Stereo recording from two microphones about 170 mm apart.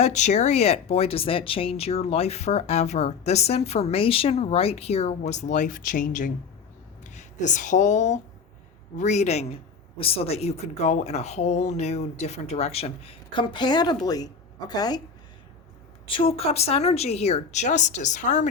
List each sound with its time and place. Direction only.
0.0 s speech: 45° left (ahead or behind); by 15.0 s 25° left (ahead or behind)
16.0 s speech: 30° left (ahead or behind)